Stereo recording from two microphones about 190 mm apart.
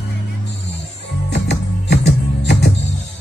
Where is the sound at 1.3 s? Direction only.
65° left (ahead or behind).